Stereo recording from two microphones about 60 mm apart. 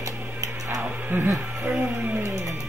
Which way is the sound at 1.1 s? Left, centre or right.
Right.